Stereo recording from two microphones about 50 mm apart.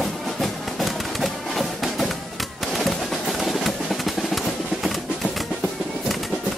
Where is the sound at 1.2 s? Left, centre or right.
Centre.